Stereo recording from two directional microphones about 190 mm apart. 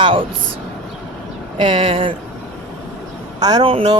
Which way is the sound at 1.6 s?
25° right (ahead or behind).